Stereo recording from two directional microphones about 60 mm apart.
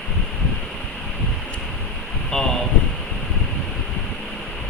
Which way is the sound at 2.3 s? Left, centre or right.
Centre.